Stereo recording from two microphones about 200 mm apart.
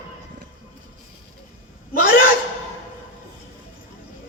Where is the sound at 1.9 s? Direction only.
45° left (ahead or behind).